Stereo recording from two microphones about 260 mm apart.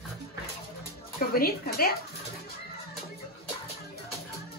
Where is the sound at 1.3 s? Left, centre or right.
Left.